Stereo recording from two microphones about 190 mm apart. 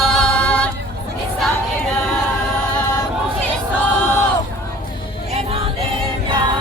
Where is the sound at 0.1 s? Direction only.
5° left (ahead or behind).